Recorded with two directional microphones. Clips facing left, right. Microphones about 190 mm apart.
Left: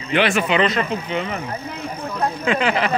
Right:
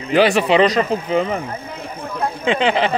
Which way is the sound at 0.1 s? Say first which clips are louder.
Right 5 dB; 35° right (ahead or behind).